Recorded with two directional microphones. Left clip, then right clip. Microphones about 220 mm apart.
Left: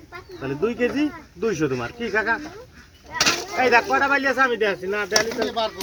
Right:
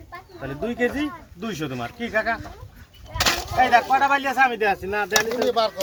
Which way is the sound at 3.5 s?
40° right (ahead or behind).